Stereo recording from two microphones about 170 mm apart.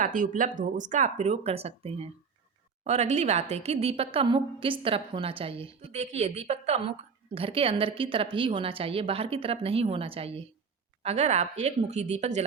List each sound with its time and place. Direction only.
0.0 s a woman's voice: 50° right (ahead or behind)